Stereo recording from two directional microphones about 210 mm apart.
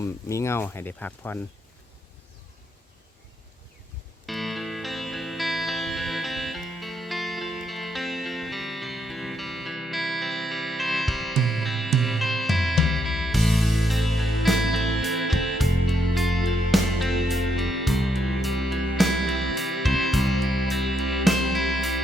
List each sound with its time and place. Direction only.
0.0 s speech: 15° left (ahead or behind)
4.3 s music: centre (ahead or behind)